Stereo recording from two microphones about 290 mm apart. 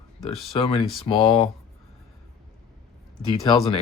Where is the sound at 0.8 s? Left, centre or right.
Centre.